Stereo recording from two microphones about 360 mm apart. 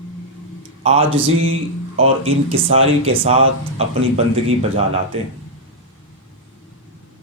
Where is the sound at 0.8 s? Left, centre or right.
Centre.